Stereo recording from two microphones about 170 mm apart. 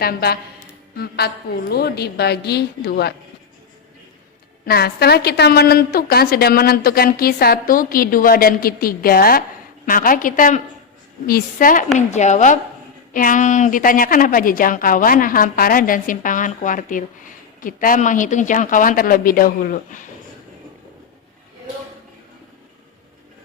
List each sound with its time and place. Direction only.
0.0 s a woman's voice: 65° left (ahead or behind)
4.6 s a woman's voice: 65° left (ahead or behind)